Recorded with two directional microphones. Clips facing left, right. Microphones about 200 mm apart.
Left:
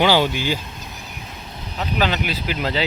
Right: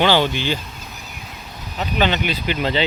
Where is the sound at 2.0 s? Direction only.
Centre (ahead or behind).